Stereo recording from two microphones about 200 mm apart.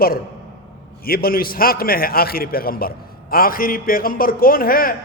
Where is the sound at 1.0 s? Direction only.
50° left (ahead or behind).